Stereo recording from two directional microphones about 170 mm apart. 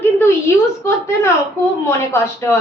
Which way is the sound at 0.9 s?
15° left (ahead or behind).